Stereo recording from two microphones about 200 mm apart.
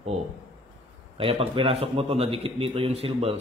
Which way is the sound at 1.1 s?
25° right (ahead or behind).